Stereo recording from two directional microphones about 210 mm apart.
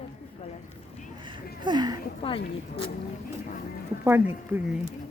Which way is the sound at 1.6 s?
20° right (ahead or behind).